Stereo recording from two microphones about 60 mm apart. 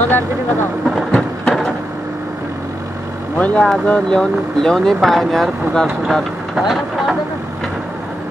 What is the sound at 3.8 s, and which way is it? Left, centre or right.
Speech, centre.